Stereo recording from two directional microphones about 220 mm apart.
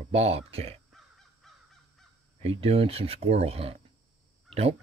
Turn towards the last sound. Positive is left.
turn(degrees=-25)  # may be behind; listen again after turning